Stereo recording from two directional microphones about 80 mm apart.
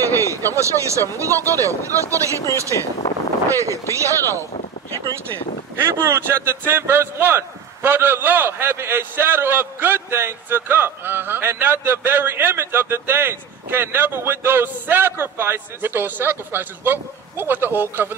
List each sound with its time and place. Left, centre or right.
0.1 s speech: right
3.4 s speech: right
5.8 s a man's voice: right